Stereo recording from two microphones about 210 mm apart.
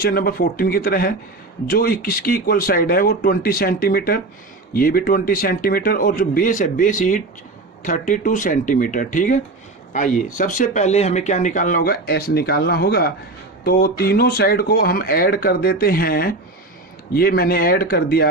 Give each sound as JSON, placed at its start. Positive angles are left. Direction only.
{"t": 0.0, "sound": "speech", "side_deg": 45}